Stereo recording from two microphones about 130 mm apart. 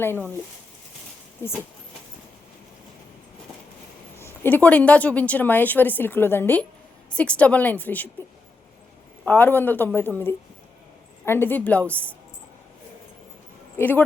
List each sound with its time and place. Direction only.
0.0 s a woman's voice: 15° left (ahead or behind)
4.2 s a woman's voice: 15° left (ahead or behind)
9.2 s a woman's voice: 15° left (ahead or behind)
13.7 s speech: 15° left (ahead or behind)